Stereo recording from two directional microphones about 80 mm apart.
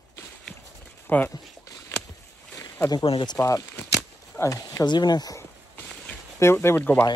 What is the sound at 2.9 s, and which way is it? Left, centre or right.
Speech, left.